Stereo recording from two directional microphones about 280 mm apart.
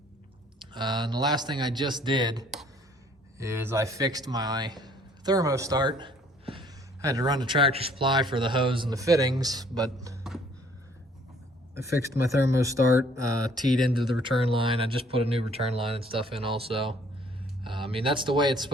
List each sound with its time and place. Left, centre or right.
0.7 s speech: centre
11.7 s speech: centre